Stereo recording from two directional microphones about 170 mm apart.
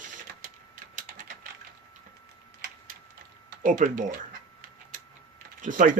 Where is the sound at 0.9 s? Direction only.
55° right (ahead or behind).